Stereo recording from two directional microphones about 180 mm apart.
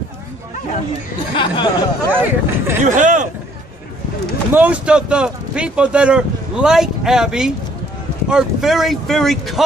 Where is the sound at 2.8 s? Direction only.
45° right (ahead or behind).